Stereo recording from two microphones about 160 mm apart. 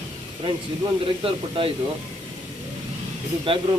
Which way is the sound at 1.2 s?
35° right (ahead or behind).